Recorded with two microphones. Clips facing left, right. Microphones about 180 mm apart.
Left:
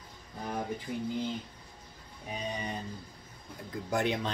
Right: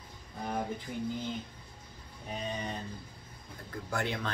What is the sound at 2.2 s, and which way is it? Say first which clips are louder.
Speech: even; 10° left (ahead or behind).